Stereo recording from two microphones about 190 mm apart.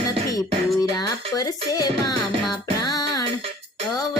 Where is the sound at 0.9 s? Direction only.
20° left (ahead or behind).